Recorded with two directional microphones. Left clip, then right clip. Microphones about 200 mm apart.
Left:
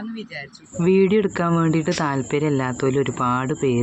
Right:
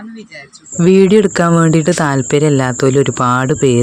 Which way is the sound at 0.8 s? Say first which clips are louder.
Right 8 dB; 35° right (ahead or behind).